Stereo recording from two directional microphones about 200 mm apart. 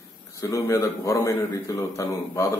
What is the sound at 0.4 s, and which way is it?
A man's voice, 15° left (ahead or behind).